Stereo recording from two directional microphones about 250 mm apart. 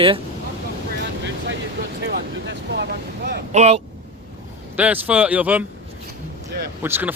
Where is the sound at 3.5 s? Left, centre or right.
Right.